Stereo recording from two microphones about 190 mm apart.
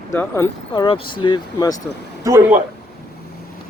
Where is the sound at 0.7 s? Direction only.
25° left (ahead or behind).